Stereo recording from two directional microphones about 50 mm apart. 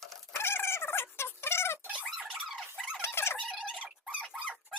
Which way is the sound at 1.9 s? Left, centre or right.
Right.